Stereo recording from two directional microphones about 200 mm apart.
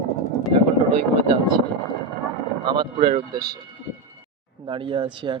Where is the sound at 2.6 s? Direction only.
25° right (ahead or behind).